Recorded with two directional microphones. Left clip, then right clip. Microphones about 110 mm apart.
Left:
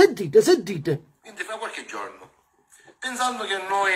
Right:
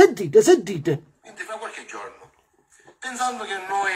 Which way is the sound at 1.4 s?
45° left (ahead or behind).